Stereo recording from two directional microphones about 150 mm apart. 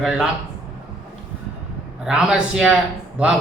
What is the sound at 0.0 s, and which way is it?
Speech, 5° right (ahead or behind).